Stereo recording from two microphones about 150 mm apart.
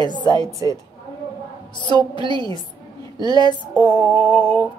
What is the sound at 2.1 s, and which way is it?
A woman's voice, 30° left (ahead or behind).